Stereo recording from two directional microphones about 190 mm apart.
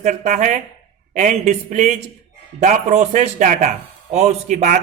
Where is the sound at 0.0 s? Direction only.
40° right (ahead or behind).